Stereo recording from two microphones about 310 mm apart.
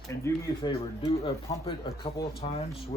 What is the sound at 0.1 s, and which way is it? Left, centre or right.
Speech, centre.